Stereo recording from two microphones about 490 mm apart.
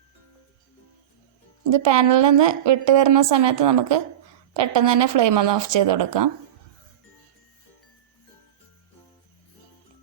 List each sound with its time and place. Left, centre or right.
1.7 s a woman's voice: right